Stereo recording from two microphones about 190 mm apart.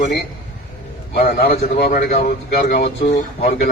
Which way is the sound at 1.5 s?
40° left (ahead or behind).